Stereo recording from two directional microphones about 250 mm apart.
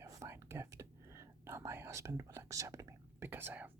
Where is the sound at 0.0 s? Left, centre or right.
Centre.